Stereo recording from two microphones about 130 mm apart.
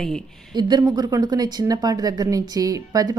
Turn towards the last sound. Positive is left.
turn(degrees=-30)  # may be behind; listen again after turning